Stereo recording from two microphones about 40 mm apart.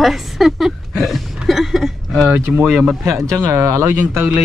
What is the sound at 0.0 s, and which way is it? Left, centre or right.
A woman's voice, centre.